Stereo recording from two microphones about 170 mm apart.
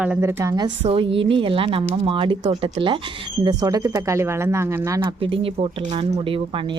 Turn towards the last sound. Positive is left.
turn(degrees=-30)  # may be behind; listen again after turning